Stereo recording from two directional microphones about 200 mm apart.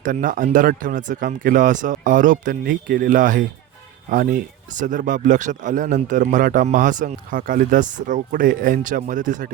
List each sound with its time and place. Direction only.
0.0 s a man's voice: 40° right (ahead or behind)